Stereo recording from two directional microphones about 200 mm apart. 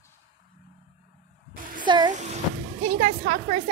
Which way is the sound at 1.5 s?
45° right (ahead or behind).